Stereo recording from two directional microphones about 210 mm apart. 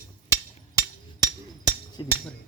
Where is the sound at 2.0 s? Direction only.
20° left (ahead or behind).